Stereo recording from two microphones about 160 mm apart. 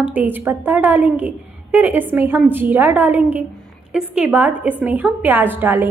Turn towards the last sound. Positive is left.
turn(degrees=-10)  # may be behind; listen again after turning